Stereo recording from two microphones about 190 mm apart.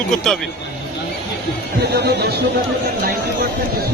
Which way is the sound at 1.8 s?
60° right (ahead or behind).